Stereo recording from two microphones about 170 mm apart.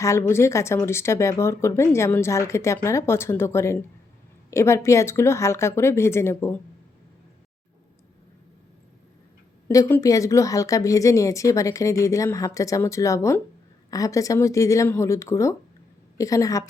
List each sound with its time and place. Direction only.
0.0 s speech: 15° left (ahead or behind)
9.6 s a woman's voice: 15° left (ahead or behind)